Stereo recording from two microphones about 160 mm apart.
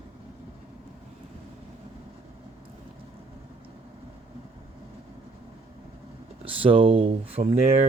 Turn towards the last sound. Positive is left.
turn(degrees=-40)  # may be behind; listen again after turning